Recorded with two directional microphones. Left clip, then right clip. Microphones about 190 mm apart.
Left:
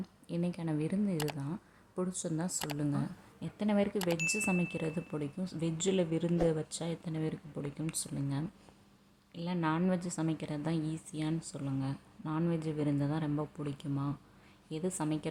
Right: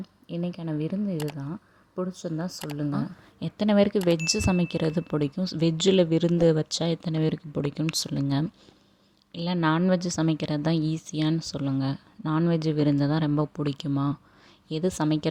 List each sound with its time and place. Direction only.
0.3 s speech: 25° right (ahead or behind)
1.1 s speech: centre (ahead or behind)
2.5 s speech: centre (ahead or behind)
3.4 s speech: 35° right (ahead or behind)
3.9 s speech: centre (ahead or behind)
4.3 s speech: 30° right (ahead or behind)